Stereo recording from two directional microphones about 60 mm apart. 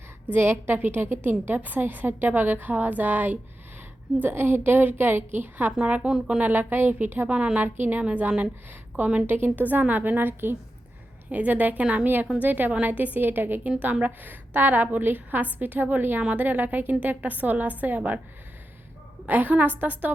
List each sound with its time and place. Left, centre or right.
0.3 s a woman's voice: right; by 6.4 s centre
6.4 s a woman's voice: right
7.3 s a woman's voice: centre
7.6 s a woman's voice: right
11.3 s a woman's voice: right
12.0 s a woman's voice: right
13.7 s a woman's voice: right
19.3 s a woman's voice: right